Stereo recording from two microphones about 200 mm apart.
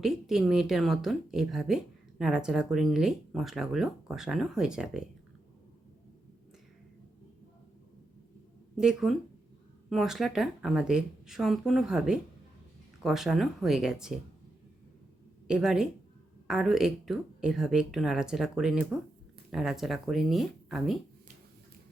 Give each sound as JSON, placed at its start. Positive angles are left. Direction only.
{"t": 0.0, "sound": "a woman's voice", "side_deg": 0}
{"t": 8.7, "sound": "a woman's voice", "side_deg": -5}
{"t": 15.4, "sound": "a woman's voice", "side_deg": -5}